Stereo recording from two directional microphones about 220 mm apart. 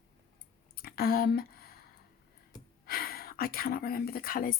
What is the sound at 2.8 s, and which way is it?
Speech, 45° left (ahead or behind).